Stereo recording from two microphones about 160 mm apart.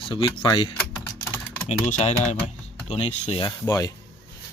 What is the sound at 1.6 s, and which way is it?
Speech, 45° left (ahead or behind).